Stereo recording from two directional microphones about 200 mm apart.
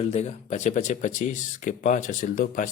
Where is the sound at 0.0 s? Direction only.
35° left (ahead or behind).